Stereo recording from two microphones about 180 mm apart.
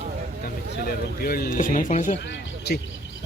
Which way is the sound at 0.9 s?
55° left (ahead or behind).